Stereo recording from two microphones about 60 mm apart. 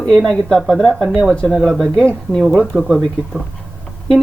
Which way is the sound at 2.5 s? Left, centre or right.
Centre.